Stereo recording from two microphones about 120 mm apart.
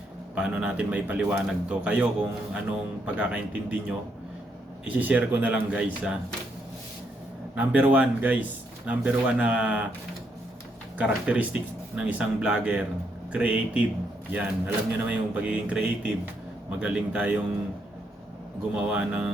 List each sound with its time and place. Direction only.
0.3 s speech: 5° right (ahead or behind)
7.5 s speech: 10° right (ahead or behind)
10.9 s speech: 10° right (ahead or behind)
18.7 s speech: 10° right (ahead or behind)